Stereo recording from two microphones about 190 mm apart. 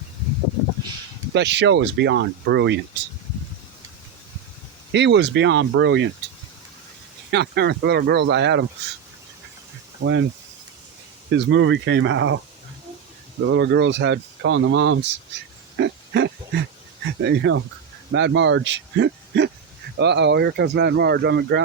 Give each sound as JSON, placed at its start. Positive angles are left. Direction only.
{"t": 1.3, "sound": "speech", "side_deg": -65}
{"t": 4.9, "sound": "speech", "side_deg": -65}
{"t": 7.3, "sound": "speech", "side_deg": -60}
{"t": 10.0, "sound": "speech", "side_deg": -80}
{"t": 11.3, "sound": "speech", "side_deg": -70}
{"t": 13.5, "sound": "speech", "side_deg": -70}
{"t": 15.8, "sound": "a sound", "side_deg": -65}
{"t": 17.2, "sound": "speech", "side_deg": -70}